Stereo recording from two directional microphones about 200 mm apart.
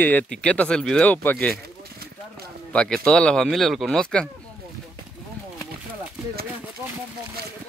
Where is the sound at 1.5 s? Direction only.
50° right (ahead or behind).